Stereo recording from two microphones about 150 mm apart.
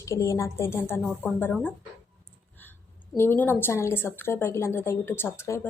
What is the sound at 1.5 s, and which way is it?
Speech, 5° left (ahead or behind).